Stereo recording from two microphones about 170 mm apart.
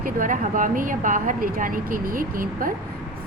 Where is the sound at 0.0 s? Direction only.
50° right (ahead or behind).